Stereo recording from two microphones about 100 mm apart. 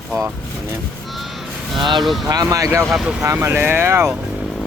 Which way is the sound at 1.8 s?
50° right (ahead or behind).